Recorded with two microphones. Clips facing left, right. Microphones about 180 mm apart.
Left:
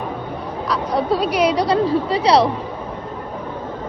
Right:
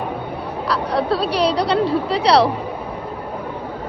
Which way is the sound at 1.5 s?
70° right (ahead or behind).